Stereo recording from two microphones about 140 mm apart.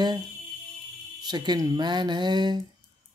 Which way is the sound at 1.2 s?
30° right (ahead or behind).